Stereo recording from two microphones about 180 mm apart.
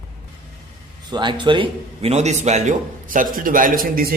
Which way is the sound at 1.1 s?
25° right (ahead or behind).